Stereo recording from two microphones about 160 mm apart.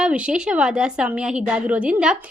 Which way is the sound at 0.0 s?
5° right (ahead or behind).